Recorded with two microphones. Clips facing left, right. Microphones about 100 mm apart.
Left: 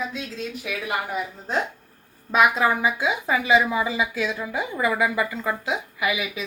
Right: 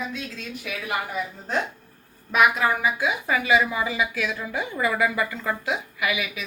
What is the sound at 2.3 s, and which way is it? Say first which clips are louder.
A woman's voice: left 1 dB; 25° left (ahead or behind).